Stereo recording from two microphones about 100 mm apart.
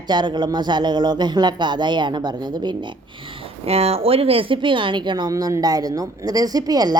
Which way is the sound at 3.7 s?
90° right.